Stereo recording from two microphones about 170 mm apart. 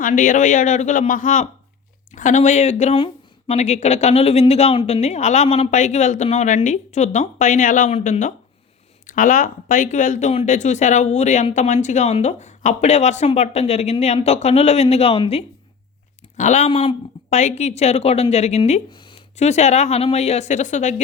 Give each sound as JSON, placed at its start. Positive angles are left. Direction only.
{"t": 0.0, "sound": "a woman's voice", "side_deg": 50}
{"t": 9.0, "sound": "a woman's voice", "side_deg": 50}
{"t": 16.4, "sound": "a woman's voice", "side_deg": 45}
{"t": 18.9, "sound": "a sound", "side_deg": 30}
{"t": 19.4, "sound": "speech", "side_deg": 40}